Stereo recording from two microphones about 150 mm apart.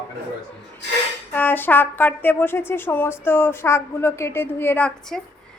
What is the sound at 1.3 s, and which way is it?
A woman's voice, 15° left (ahead or behind).